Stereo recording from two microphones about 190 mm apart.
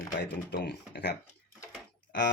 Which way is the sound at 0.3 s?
60° left (ahead or behind).